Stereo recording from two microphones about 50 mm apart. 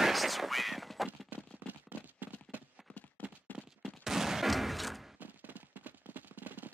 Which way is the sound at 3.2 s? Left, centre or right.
Left.